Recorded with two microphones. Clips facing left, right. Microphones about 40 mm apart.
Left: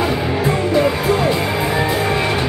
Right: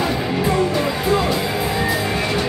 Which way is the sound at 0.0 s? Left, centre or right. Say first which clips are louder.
Left 2 dB; centre.